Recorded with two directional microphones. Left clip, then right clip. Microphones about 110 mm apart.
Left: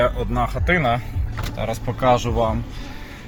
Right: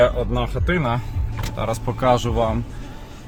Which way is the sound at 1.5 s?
65° right (ahead or behind).